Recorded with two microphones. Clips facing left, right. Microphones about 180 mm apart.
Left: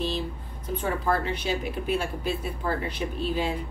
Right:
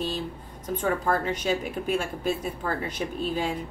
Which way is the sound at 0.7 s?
45° right (ahead or behind).